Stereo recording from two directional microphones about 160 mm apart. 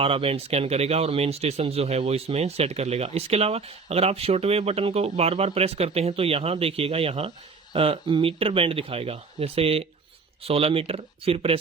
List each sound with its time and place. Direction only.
0.0 s speech: 35° right (ahead or behind)